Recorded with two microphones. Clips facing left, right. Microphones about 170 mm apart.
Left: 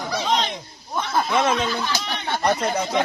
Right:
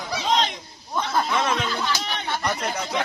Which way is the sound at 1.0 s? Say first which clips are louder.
Left 2 dB; 20° left (ahead or behind).